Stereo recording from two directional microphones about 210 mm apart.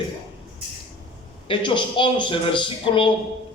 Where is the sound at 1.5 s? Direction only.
25° left (ahead or behind).